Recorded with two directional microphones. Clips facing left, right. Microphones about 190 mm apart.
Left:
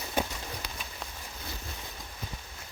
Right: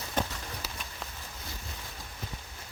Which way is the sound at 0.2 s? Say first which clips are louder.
Left 1 dB; 10° left (ahead or behind).